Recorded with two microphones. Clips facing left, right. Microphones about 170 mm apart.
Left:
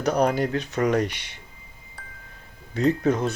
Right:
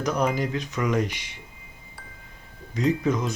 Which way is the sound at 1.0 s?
65° left (ahead or behind).